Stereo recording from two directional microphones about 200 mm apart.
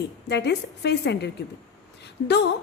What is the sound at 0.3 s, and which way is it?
A woman's voice, 55° left (ahead or behind).